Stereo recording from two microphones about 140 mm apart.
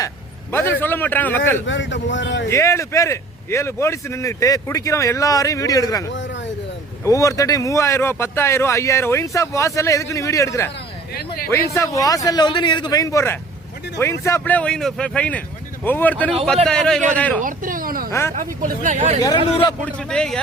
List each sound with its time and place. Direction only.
0.5 s a man's voice: 15° left (ahead or behind)
17.4 s speech: 80° right
18.3 s speech: 65° right (ahead or behind)
19.4 s speech: 45° left (ahead or behind)
19.8 s a man's voice: 5° left (ahead or behind)